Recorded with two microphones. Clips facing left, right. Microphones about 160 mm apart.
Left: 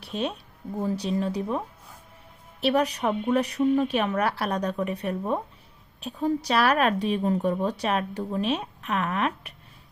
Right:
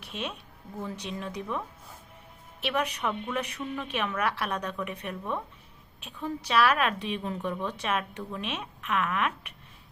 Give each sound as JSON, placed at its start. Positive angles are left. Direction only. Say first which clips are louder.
{"t": 0.0, "sound": "speech", "louder": "left 7 dB", "side_deg": 35}